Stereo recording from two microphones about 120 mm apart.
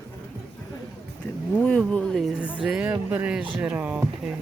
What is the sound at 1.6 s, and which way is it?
Speech, 10° left (ahead or behind).